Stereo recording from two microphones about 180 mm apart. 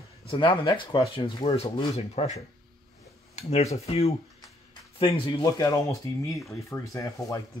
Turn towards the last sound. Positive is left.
turn(degrees=20)  # may be behind; listen again after turning